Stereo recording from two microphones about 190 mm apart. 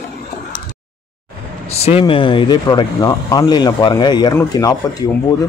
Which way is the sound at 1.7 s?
30° left (ahead or behind).